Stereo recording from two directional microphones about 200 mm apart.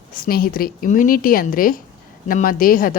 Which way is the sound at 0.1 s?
45° left (ahead or behind).